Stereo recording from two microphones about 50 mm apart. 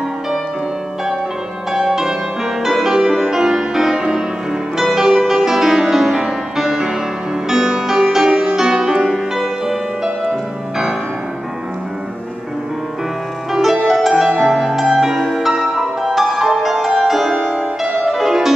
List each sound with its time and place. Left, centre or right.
1.7 s music: centre
13.5 s music: centre
17.3 s music: centre
18.1 s music: centre